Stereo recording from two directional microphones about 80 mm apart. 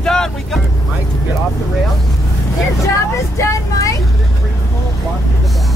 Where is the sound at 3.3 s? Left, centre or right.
Left.